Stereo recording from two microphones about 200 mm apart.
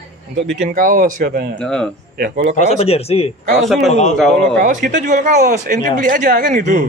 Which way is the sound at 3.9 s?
35° left (ahead or behind).